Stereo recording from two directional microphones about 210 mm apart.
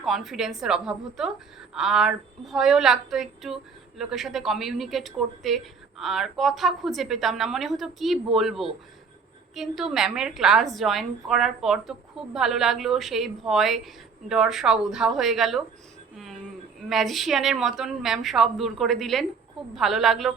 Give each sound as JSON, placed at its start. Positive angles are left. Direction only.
{"t": 0.0, "sound": "a woman's voice", "side_deg": 0}
{"t": 16.1, "sound": "a sound", "side_deg": 0}
{"t": 16.9, "sound": "a woman's voice", "side_deg": 0}